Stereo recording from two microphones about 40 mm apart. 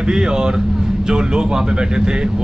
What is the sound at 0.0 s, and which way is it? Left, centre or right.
Speech, centre.